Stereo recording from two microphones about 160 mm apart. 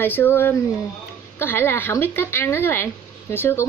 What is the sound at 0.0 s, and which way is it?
Speech, 15° left (ahead or behind).